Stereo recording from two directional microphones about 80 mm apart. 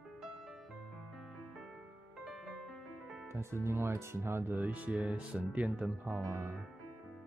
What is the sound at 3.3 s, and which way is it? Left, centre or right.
Speech, right.